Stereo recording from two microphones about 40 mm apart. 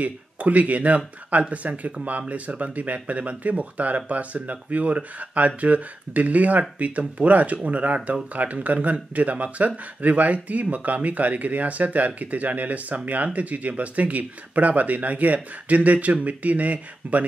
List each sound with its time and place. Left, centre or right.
0.0 s speech: right